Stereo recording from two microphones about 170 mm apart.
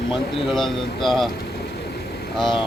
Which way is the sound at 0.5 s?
Centre (ahead or behind).